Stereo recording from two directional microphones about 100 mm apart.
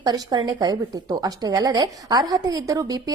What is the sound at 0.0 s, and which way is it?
A woman's voice, 45° right (ahead or behind).